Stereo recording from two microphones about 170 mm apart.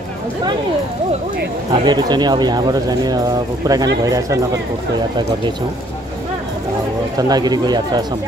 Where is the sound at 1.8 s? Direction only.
25° right (ahead or behind).